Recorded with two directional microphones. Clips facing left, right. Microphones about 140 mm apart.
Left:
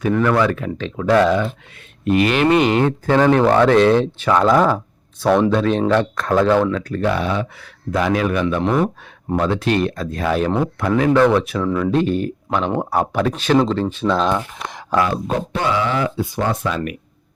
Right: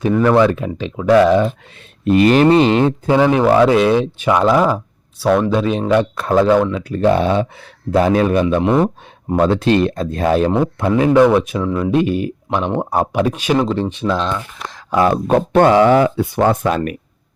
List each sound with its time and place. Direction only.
0.0 s speech: 20° right (ahead or behind)
2.0 s a man's voice: 35° right (ahead or behind)
3.1 s speech: 10° right (ahead or behind)
7.0 s a man's voice: 30° right (ahead or behind)
10.6 s speech: 20° right (ahead or behind)
14.0 s speech: 5° right (ahead or behind)
14.3 s speech: 15° left (ahead or behind)
15.5 s speech: 55° right (ahead or behind)